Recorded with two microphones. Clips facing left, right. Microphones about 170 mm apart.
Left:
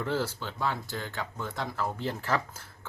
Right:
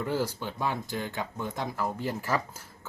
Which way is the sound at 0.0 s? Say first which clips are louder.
Right 1 dB; 10° right (ahead or behind).